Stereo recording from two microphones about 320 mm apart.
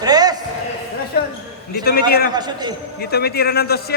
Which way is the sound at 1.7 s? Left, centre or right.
Left.